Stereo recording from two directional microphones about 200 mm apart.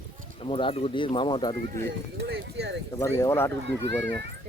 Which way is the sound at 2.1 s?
60° right (ahead or behind).